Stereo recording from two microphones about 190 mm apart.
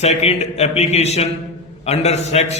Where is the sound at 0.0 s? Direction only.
35° left (ahead or behind).